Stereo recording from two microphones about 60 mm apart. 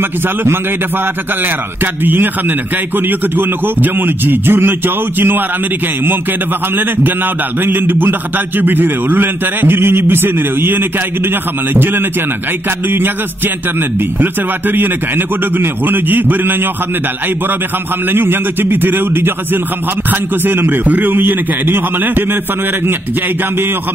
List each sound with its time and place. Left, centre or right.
2.0 s a man's voice: right
6.8 s a man's voice: right
13.7 s a man's voice: right
18.1 s a man's voice: right